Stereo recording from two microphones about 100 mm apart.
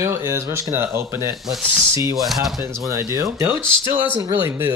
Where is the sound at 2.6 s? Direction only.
30° right (ahead or behind).